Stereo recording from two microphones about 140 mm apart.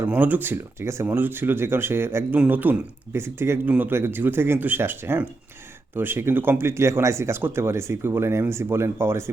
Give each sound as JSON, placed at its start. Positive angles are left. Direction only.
{"t": 0.0, "sound": "speech", "side_deg": -15}